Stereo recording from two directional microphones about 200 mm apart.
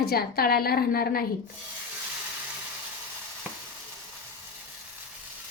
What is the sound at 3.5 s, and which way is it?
Sizzle, 10° right (ahead or behind).